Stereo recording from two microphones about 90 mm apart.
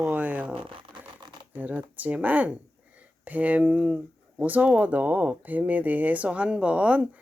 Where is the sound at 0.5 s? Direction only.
80° right.